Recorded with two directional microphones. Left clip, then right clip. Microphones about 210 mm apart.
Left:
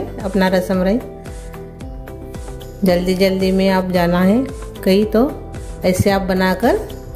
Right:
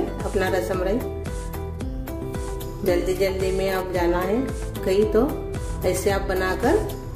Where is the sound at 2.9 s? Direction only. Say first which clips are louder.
Left 6 dB; 45° left (ahead or behind).